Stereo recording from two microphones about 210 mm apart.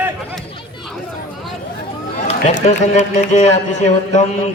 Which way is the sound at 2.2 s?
35° left (ahead or behind).